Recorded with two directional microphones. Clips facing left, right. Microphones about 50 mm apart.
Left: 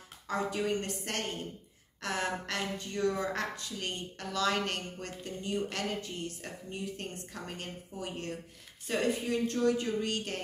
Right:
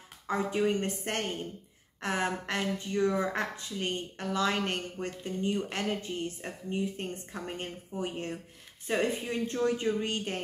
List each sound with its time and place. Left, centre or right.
0.3 s speech: right